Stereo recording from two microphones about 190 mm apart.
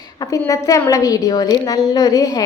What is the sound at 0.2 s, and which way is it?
A woman's voice, 15° left (ahead or behind).